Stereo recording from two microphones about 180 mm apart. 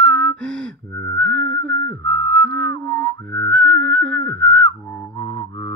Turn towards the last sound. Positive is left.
turn(degrees=20)  # may be behind; listen again after turning